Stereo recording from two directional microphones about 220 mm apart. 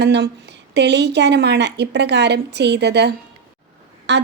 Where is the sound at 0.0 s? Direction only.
50° right (ahead or behind).